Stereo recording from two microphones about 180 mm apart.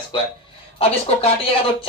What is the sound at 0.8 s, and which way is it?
Speech, 35° left (ahead or behind).